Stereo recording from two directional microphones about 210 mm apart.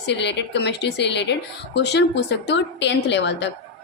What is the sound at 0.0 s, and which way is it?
A woman's voice, 55° left (ahead or behind).